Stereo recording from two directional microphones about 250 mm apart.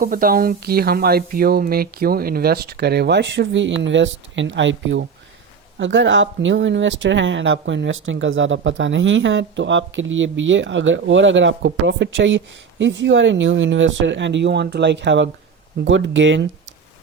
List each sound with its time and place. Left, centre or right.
0.0 s speech: right